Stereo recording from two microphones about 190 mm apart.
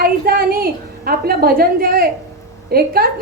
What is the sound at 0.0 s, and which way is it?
A woman's voice, 50° right (ahead or behind).